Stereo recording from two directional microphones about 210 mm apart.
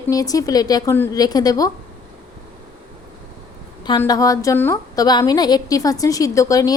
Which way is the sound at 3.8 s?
20° left (ahead or behind).